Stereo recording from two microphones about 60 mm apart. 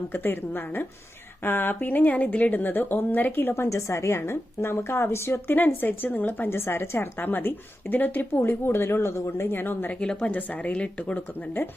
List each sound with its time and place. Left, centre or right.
0.1 s a woman's voice: left
3.5 s a woman's voice: left
10.0 s speech: centre